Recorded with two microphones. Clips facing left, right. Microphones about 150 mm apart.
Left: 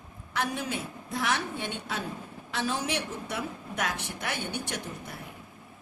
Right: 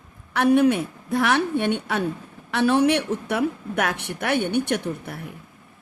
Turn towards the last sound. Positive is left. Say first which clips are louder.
# right 11 dB
turn(degrees=-60)  # may be behind; listen again after turning